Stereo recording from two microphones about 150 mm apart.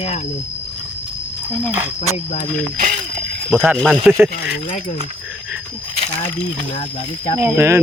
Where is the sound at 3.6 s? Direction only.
Centre (ahead or behind).